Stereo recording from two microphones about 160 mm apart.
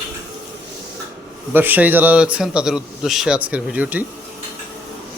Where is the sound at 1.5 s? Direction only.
10° right (ahead or behind).